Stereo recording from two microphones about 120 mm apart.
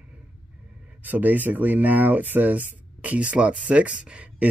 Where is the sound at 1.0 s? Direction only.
15° right (ahead or behind).